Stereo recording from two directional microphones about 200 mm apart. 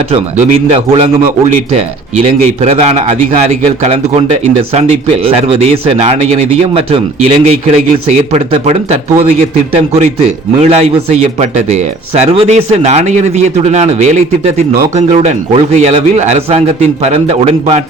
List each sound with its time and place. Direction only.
0.1 s a man's voice: 30° right (ahead or behind)
4.7 s a man's voice: 30° right (ahead or behind)
10.6 s a man's voice: 30° right (ahead or behind)